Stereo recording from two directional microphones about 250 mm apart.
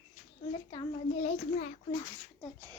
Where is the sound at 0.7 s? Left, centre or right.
Centre.